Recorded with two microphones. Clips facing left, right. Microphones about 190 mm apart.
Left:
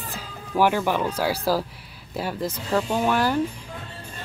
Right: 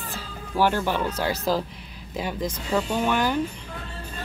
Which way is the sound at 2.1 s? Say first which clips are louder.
Left 1 dB; 15° right (ahead or behind).